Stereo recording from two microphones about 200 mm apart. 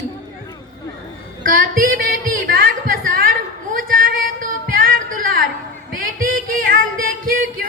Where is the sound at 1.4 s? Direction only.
45° right (ahead or behind).